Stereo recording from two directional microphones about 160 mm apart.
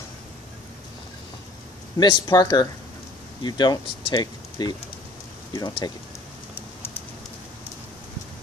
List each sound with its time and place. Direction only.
2.0 s speech: 30° left (ahead or behind)